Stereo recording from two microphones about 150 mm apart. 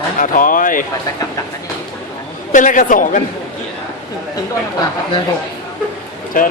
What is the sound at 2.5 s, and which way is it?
Speech, 60° left (ahead or behind).